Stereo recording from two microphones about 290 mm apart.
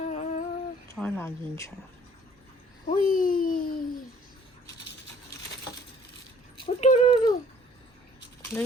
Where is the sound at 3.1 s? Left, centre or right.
Left.